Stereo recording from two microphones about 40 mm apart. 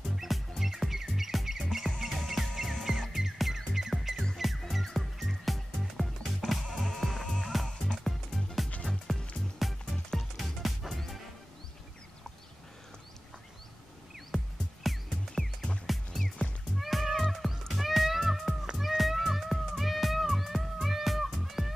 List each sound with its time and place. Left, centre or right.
0.1 s music: centre
14.3 s music: centre
15.4 s music: centre
15.9 s music: centre